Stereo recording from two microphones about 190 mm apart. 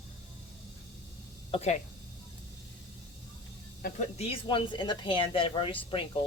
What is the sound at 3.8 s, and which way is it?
Speech, 40° left (ahead or behind).